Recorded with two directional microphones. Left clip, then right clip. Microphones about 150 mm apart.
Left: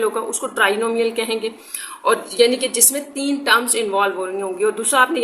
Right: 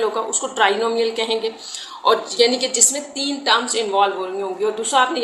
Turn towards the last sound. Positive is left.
turn(degrees=35)  # may be behind; listen again after turning